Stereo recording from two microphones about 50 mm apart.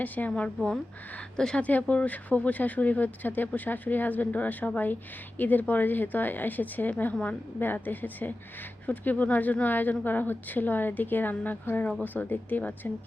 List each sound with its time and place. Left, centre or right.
0.0 s a woman's voice: left
1.4 s a woman's voice: centre
1.6 s a woman's voice: left
7.6 s speech: left